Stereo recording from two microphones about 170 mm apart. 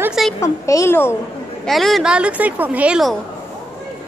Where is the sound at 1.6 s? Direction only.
Centre (ahead or behind).